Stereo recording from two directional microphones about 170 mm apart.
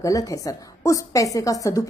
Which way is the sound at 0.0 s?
20° left (ahead or behind).